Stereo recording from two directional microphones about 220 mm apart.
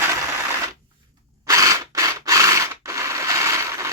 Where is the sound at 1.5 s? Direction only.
15° right (ahead or behind).